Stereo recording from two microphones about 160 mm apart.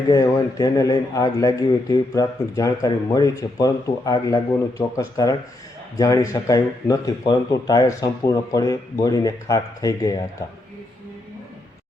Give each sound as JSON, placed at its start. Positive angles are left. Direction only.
{"t": 0.1, "sound": "speech", "side_deg": 20}